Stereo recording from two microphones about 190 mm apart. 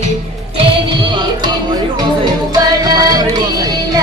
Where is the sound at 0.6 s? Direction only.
25° right (ahead or behind).